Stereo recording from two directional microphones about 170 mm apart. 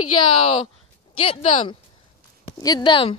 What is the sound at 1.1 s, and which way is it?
Speech, 35° left (ahead or behind).